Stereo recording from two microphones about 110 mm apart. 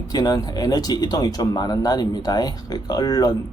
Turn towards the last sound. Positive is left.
turn(degrees=35)  # may be behind; listen again after turning